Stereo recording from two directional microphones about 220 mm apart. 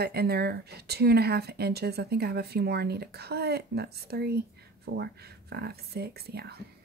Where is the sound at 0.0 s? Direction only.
45° right (ahead or behind).